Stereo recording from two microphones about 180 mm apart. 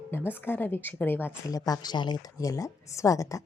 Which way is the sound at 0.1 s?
10° left (ahead or behind).